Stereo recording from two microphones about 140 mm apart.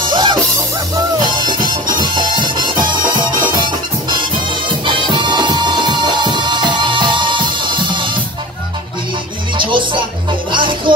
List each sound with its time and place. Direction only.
0.0 s music: 35° right (ahead or behind)
9.6 s music: 35° right (ahead or behind)